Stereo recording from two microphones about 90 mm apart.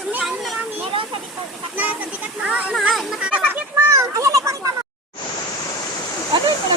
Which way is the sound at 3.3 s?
15° right (ahead or behind).